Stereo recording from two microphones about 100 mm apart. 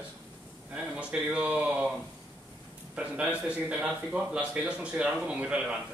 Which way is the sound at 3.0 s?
10° right (ahead or behind).